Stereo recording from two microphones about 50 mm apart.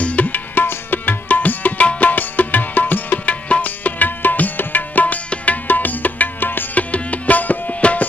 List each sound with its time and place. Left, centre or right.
0.0 s music: left